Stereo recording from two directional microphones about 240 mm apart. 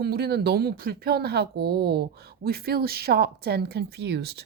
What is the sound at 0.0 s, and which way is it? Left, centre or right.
Speech, right.